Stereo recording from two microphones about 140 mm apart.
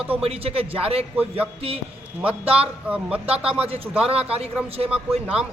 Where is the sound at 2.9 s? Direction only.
10° right (ahead or behind).